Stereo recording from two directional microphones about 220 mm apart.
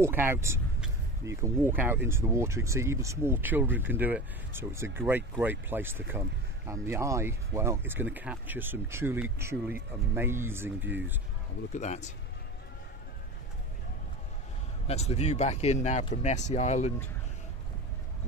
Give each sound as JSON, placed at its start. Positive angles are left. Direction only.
{"t": 0.0, "sound": "speech", "side_deg": -10}
{"t": 11.7, "sound": "speech", "side_deg": 30}
{"t": 14.9, "sound": "speech", "side_deg": 30}